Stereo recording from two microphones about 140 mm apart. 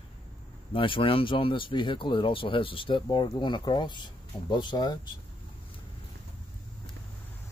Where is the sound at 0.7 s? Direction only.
40° left (ahead or behind).